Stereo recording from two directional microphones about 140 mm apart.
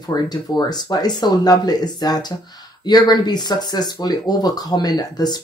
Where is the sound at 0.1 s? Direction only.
30° left (ahead or behind).